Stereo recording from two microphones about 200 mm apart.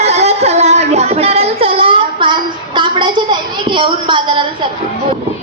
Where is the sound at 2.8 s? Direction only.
25° right (ahead or behind).